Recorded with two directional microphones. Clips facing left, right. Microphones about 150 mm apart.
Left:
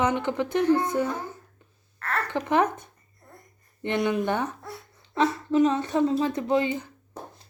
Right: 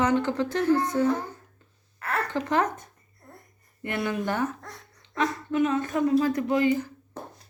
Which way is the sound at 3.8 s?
20° left (ahead or behind).